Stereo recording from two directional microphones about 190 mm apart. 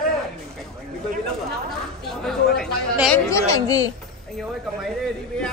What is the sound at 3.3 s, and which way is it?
Speech, 15° left (ahead or behind).